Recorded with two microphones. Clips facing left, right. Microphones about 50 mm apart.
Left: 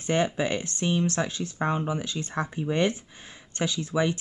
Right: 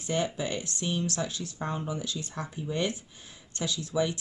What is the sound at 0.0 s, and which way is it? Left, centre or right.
Speech, left.